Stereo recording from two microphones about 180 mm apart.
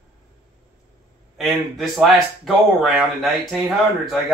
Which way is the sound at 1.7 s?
Centre (ahead or behind).